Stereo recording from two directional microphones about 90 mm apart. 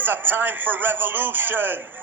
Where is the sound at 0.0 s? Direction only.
20° right (ahead or behind).